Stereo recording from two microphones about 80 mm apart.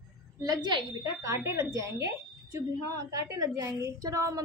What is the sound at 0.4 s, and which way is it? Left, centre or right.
Speech, right.